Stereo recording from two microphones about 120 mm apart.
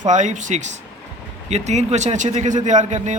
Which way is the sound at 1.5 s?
70° right (ahead or behind).